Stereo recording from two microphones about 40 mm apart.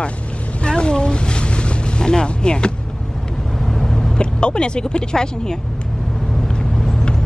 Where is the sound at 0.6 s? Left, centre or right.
Left.